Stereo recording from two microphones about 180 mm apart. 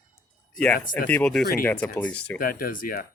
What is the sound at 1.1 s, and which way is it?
Speech, 5° left (ahead or behind).